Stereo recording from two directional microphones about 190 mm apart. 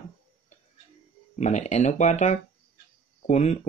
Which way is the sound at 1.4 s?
40° left (ahead or behind).